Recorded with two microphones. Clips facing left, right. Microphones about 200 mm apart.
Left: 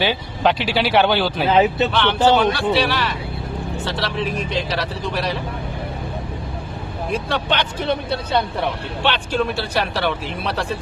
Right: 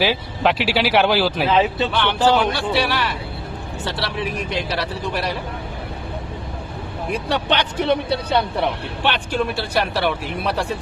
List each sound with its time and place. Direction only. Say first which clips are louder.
0.0 s speech: even; centre (ahead or behind)
1.5 s speech: left 6 dB; 30° left (ahead or behind)
1.9 s speech: left 1 dB; 10° right (ahead or behind)
7.1 s speech: right 1 dB; 15° right (ahead or behind)
9.0 s speech: left 1 dB; 10° right (ahead or behind)